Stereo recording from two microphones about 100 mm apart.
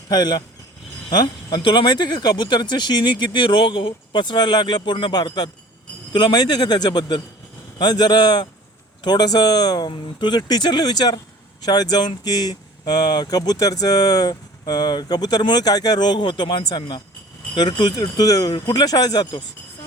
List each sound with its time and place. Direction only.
0.1 s speech: 45° left (ahead or behind)